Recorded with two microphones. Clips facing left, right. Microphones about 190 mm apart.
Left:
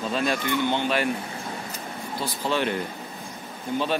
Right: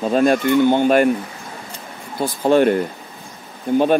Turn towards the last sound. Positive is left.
turn(degrees=-55)  # may be behind; listen again after turning